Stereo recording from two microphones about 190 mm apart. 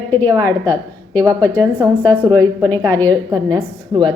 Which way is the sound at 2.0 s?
20° right (ahead or behind).